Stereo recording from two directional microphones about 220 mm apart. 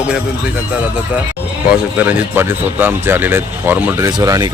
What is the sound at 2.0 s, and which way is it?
Speech, 10° right (ahead or behind).